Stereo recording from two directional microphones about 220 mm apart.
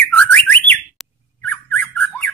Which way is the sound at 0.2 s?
5° left (ahead or behind).